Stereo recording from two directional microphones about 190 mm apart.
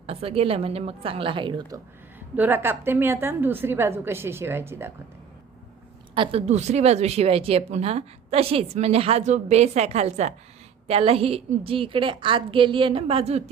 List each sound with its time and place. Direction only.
0.0 s a woman's voice: 30° right (ahead or behind)
2.1 s a woman's voice: 10° right (ahead or behind)
6.1 s a woman's voice: 35° right (ahead or behind)